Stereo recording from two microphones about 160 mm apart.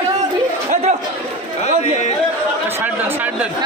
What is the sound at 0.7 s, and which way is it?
Chatter, 45° right (ahead or behind).